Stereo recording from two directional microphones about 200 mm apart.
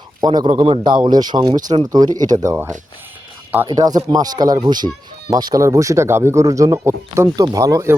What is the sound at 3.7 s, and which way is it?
A man's voice, 20° right (ahead or behind).